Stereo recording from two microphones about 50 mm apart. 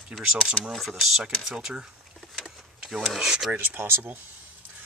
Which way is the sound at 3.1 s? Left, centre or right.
Centre.